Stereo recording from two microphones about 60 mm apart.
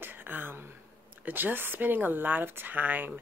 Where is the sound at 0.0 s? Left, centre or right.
Right.